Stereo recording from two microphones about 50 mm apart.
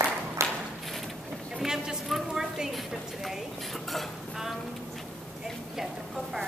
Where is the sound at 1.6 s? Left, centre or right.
Centre.